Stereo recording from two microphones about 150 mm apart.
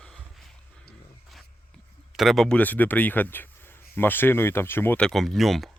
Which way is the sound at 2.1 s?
Centre (ahead or behind).